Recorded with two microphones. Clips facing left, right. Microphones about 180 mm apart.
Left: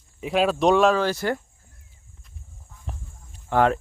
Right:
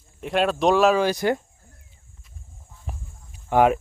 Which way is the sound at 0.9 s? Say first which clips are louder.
Right 2 dB; 15° right (ahead or behind).